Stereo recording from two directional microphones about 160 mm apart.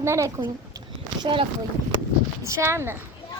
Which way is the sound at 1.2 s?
30° right (ahead or behind).